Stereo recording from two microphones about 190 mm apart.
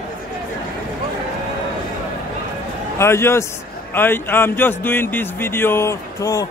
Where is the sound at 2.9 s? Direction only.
15° left (ahead or behind).